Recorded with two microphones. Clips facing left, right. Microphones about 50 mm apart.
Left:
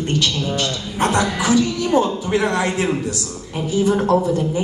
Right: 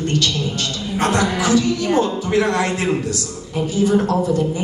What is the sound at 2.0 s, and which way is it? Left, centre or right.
Speech, left.